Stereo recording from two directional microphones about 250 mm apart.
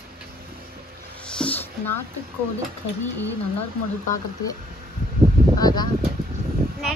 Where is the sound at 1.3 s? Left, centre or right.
Centre.